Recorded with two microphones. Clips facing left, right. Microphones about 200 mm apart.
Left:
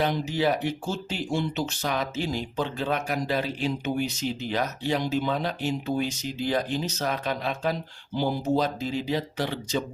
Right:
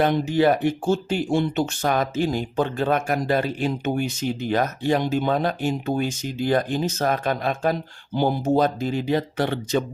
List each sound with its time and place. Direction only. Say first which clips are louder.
0.0 s speech: right 6 dB; 55° right (ahead or behind)